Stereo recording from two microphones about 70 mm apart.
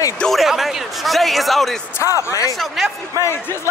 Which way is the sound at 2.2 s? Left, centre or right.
Left.